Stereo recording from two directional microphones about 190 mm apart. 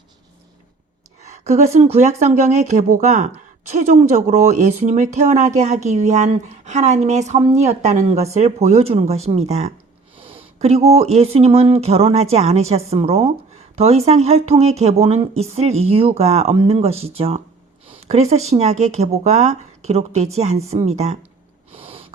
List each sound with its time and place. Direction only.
1.2 s speech: 35° right (ahead or behind)
21.7 s owl: 30° right (ahead or behind)